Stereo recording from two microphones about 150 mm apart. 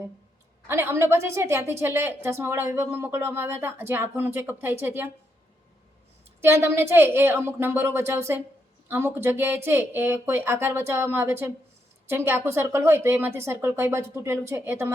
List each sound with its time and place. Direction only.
0.7 s a woman's voice: 15° right (ahead or behind)
6.4 s a woman's voice: 15° right (ahead or behind)